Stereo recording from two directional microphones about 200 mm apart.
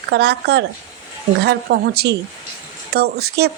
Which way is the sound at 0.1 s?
55° right (ahead or behind).